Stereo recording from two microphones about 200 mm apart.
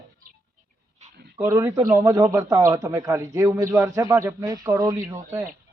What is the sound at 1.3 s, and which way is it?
A man's voice, 15° right (ahead or behind).